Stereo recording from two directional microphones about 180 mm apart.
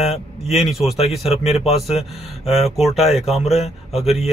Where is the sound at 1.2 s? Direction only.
35° left (ahead or behind).